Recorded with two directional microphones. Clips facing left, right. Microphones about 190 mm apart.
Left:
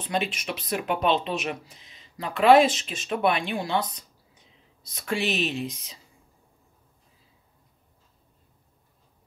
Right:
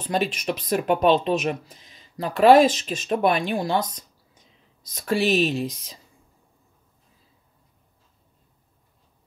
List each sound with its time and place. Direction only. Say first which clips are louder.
0.0 s speech: right 4 dB; 40° right (ahead or behind)